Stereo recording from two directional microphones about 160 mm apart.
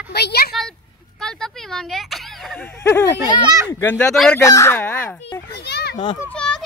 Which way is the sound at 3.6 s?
20° left (ahead or behind).